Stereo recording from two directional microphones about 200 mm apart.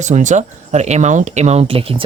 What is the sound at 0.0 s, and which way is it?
Speech, 35° right (ahead or behind).